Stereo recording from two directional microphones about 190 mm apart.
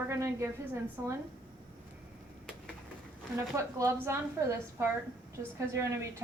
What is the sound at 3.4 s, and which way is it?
A woman's voice, 15° right (ahead or behind).